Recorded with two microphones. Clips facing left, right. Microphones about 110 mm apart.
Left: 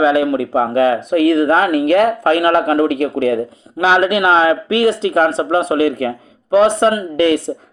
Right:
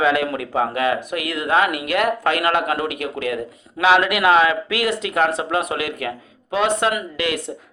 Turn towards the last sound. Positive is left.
turn(degrees=35)  # may be behind; listen again after turning